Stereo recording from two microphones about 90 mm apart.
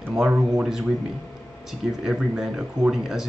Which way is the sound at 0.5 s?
5° right (ahead or behind).